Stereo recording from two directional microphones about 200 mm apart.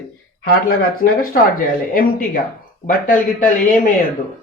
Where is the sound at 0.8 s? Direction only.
45° left (ahead or behind).